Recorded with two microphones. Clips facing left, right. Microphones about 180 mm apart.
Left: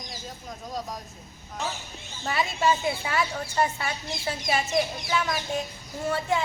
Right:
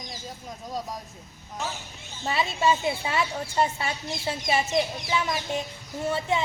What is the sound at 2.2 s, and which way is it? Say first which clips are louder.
A woman's voice: right 1 dB; 25° right (ahead or behind).